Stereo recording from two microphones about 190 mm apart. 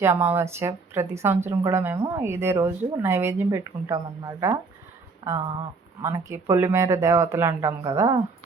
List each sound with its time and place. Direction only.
0.0 s speech: 10° right (ahead or behind)